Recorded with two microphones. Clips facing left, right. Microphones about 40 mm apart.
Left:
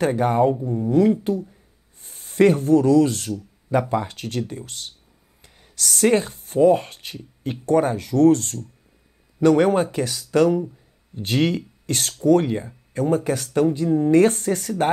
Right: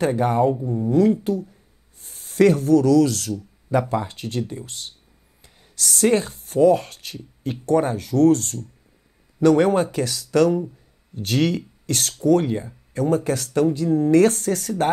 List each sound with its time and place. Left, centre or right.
0.0 s speech: left
0.6 s speech: centre
0.8 s speech: left
2.0 s speech: left
5.4 s a sound: left
5.9 s speech: left
13.8 s speech: centre
14.4 s speech: left